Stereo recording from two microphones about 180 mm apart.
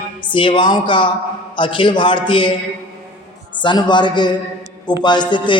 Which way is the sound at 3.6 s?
25° left (ahead or behind).